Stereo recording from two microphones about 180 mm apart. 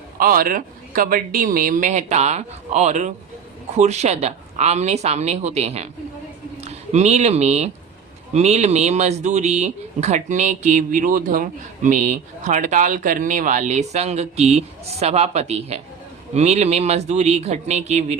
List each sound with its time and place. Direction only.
0.2 s a man's voice: 50° right (ahead or behind)